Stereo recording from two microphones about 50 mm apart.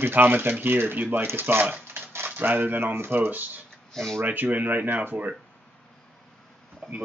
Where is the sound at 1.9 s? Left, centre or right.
Right.